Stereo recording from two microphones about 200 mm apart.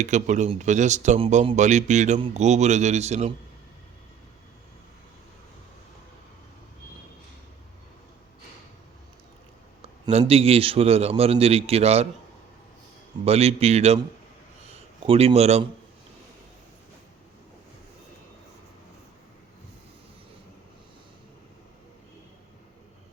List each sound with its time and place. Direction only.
0.0 s speech: 35° right (ahead or behind)
9.8 s speech: 30° right (ahead or behind)
13.2 s speech: 30° right (ahead or behind)